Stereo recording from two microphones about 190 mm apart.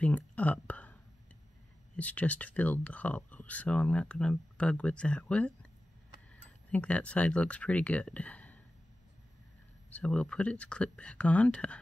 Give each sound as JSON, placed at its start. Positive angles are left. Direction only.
{"t": 0.0, "sound": "speech", "side_deg": 10}
{"t": 2.0, "sound": "speech", "side_deg": 10}
{"t": 9.9, "sound": "speech", "side_deg": 5}